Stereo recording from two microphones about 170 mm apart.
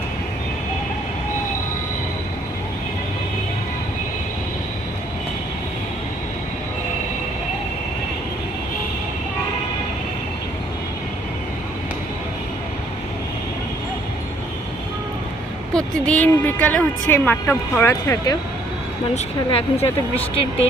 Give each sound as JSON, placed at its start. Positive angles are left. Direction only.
{"t": 15.7, "sound": "a woman's voice", "side_deg": 5}
{"t": 19.1, "sound": "speech", "side_deg": 35}